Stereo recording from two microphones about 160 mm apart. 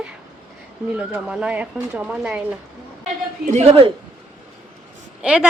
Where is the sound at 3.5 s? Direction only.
40° right (ahead or behind).